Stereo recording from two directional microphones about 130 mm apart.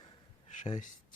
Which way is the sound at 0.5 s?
70° left (ahead or behind).